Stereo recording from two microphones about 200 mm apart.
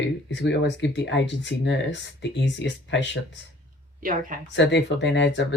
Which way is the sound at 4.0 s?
40° right (ahead or behind).